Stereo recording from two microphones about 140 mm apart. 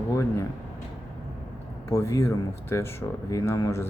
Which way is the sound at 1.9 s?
20° left (ahead or behind).